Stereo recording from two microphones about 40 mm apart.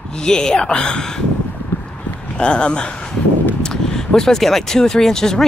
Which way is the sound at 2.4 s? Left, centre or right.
Left.